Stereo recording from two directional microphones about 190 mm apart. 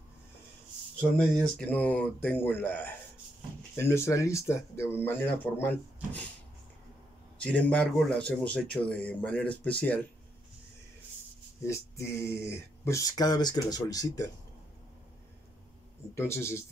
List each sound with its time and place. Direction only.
1.1 s speech: 5° left (ahead or behind)
7.3 s speech: 5° left (ahead or behind)
11.6 s speech: 15° left (ahead or behind)
16.2 s speech: 15° left (ahead or behind)